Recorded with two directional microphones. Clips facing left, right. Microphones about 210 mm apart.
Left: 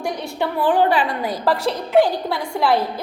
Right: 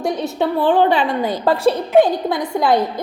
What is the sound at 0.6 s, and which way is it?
A woman's voice, 25° right (ahead or behind).